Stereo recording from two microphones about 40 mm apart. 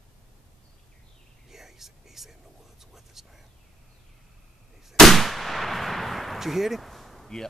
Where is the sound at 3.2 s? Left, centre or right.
Centre.